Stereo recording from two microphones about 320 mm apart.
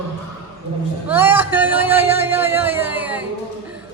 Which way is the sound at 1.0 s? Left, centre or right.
Centre.